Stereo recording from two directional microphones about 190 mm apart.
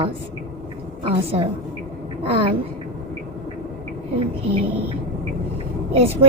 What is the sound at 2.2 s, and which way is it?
Speech, 30° right (ahead or behind).